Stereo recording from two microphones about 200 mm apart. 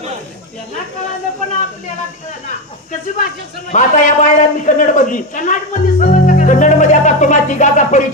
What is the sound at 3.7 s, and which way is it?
Speech, 35° left (ahead or behind).